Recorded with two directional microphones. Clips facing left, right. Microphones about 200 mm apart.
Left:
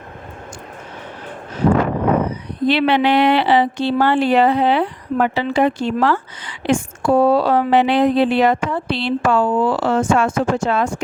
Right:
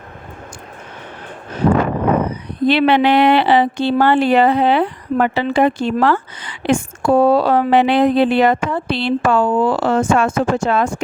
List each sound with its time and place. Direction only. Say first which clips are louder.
2.6 s speech: right 2 dB; 50° right (ahead or behind)